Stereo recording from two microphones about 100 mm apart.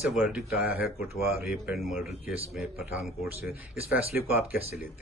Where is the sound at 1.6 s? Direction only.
Centre (ahead or behind).